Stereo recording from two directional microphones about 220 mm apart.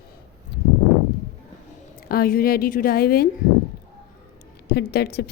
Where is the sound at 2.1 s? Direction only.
40° left (ahead or behind).